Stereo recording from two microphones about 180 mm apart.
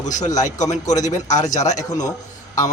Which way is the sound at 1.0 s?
40° left (ahead or behind).